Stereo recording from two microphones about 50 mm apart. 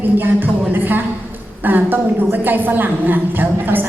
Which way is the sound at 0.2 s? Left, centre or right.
Right.